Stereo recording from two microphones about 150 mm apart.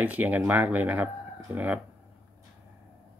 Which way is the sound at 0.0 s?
10° right (ahead or behind).